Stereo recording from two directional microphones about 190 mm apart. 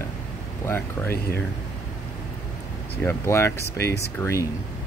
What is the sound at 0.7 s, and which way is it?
Speech, 10° left (ahead or behind).